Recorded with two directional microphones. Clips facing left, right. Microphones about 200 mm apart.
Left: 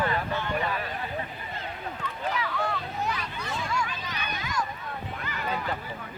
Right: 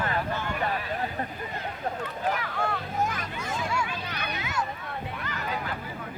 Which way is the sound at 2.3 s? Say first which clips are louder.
Even; 50° right (ahead or behind).